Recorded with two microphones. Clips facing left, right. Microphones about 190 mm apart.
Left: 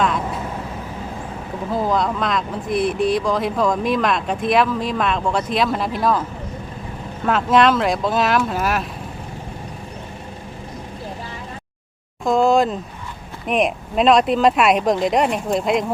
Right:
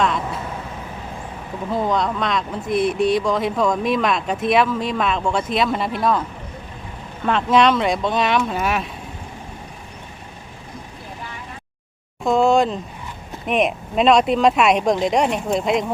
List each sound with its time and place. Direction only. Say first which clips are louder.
0.0 s vehicle: even; centre (ahead or behind)
1.7 s speech: left 1 dB; centre (ahead or behind)
7.3 s speech: left 1 dB; centre (ahead or behind)
12.2 s a sound: even; centre (ahead or behind)
13.5 s speech: even; centre (ahead or behind)